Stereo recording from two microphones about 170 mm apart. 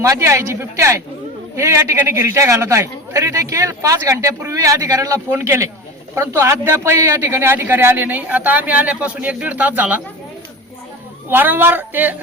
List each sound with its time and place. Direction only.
0.0 s a man's voice: 15° right (ahead or behind)
11.3 s a man's voice: 10° right (ahead or behind)